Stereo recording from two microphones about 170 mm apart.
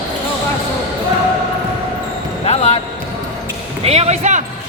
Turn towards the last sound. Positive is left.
turn(degrees=-40)  # may be behind; listen again after turning